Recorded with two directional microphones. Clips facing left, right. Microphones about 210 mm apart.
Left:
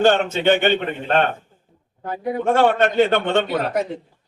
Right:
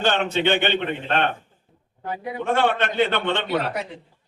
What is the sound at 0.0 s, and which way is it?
A man's voice, 45° left (ahead or behind).